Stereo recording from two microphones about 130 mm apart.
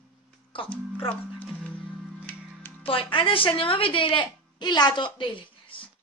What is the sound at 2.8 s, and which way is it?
A woman's voice, 40° left (ahead or behind).